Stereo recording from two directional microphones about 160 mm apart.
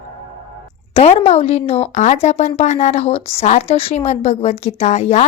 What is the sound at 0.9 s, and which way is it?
A woman's voice, 40° left (ahead or behind).